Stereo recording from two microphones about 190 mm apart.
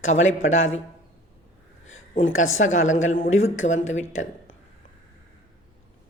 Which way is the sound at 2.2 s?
90° left.